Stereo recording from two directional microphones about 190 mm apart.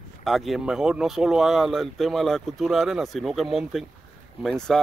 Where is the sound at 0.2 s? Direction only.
Centre (ahead or behind).